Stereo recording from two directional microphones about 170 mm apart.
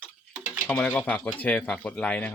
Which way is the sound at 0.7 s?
5° left (ahead or behind).